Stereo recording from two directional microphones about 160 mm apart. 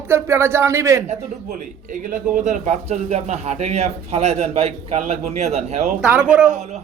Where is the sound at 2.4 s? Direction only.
50° right (ahead or behind).